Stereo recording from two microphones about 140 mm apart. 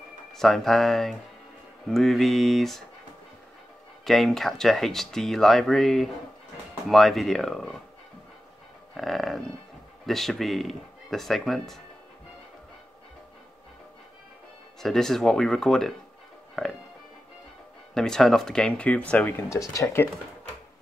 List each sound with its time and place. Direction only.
0.3 s speech: centre (ahead or behind)
4.0 s speech: centre (ahead or behind)
8.9 s speech: centre (ahead or behind)
14.8 s speech: 5° left (ahead or behind)
17.9 s speech: 5° left (ahead or behind); by 20.1 s 20° left (ahead or behind)